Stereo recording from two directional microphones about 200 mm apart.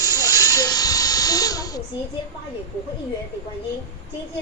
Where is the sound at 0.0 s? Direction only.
15° left (ahead or behind).